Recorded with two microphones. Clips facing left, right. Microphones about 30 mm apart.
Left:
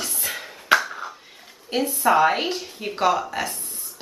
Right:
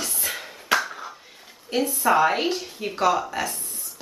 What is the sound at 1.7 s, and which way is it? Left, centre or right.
Speech, centre.